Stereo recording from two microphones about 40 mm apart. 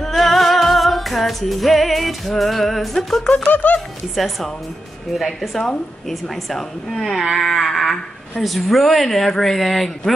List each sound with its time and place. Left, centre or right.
0.0 s music: centre
3.4 s speech: left
5.1 s speech: centre